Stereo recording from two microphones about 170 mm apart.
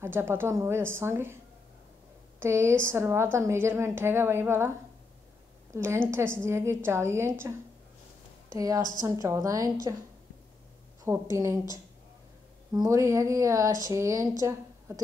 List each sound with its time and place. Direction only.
0.0 s a woman's voice: 15° right (ahead or behind)
2.4 s a woman's voice: 15° right (ahead or behind)
8.5 s speech: 20° right (ahead or behind)
11.3 s a woman's voice: 20° right (ahead or behind)
12.7 s speech: 20° right (ahead or behind)